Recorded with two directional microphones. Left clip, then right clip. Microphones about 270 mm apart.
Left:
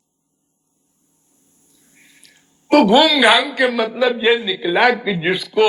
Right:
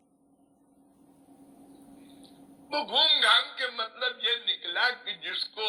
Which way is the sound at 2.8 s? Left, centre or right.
Left.